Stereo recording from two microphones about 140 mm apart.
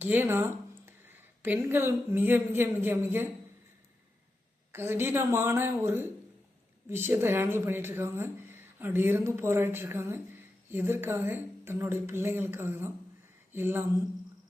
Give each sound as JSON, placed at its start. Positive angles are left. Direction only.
{"t": 0.0, "sound": "a woman's voice", "side_deg": -15}
{"t": 4.7, "sound": "speech", "side_deg": -15}